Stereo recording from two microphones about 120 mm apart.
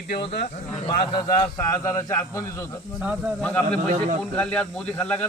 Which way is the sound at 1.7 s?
25° left (ahead or behind).